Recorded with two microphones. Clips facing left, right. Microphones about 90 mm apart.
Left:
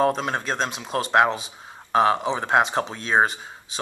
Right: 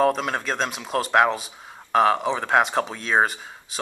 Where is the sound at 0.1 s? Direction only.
25° left (ahead or behind).